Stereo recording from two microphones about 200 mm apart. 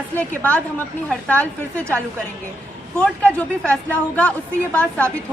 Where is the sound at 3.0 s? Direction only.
5° left (ahead or behind).